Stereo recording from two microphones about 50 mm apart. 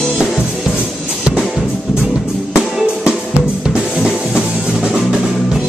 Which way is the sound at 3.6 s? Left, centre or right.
Centre.